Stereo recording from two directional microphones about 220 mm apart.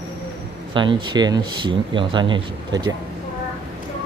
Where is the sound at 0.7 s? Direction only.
20° right (ahead or behind).